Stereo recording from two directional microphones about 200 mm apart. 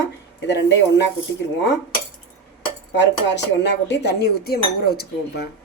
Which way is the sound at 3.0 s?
60° left (ahead or behind).